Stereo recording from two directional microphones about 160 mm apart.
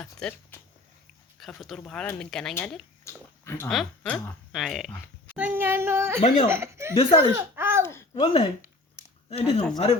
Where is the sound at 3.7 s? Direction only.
Centre (ahead or behind).